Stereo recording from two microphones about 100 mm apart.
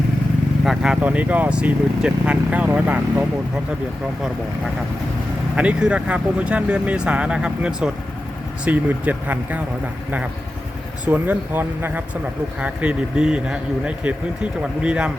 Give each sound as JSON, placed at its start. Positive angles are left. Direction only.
{"t": 0.6, "sound": "vehicle", "side_deg": -5}
{"t": 1.0, "sound": "speech", "side_deg": -15}
{"t": 5.5, "sound": "speech", "side_deg": -10}
{"t": 11.0, "sound": "speech", "side_deg": -15}